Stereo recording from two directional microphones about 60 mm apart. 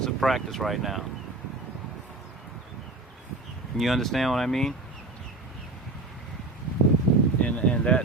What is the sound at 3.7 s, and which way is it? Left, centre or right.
Speech, centre.